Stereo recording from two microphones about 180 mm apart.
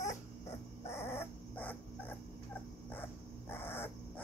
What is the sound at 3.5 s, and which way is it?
Dog, 10° left (ahead or behind).